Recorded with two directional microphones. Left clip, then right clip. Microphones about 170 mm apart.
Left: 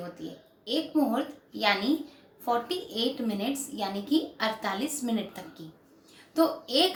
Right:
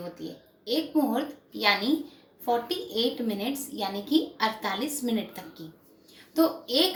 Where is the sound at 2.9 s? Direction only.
20° left (ahead or behind).